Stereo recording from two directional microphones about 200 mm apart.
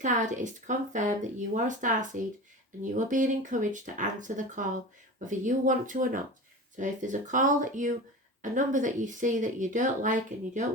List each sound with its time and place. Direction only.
0.0 s speech: 40° right (ahead or behind)